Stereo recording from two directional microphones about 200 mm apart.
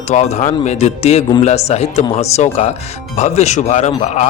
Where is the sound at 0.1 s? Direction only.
35° left (ahead or behind).